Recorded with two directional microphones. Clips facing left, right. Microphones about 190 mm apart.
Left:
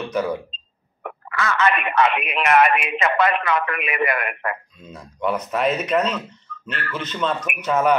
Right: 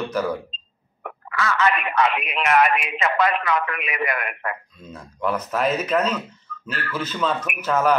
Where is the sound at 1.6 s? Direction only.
60° left (ahead or behind).